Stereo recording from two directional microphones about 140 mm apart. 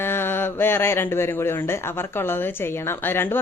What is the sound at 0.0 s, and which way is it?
Speech, 15° left (ahead or behind).